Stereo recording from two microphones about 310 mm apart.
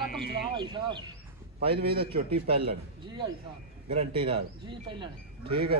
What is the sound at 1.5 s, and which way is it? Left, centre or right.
Speech, right.